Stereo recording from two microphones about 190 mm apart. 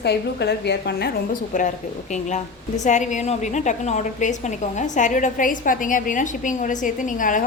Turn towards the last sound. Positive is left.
turn(degrees=45)  # may be behind; listen again after turning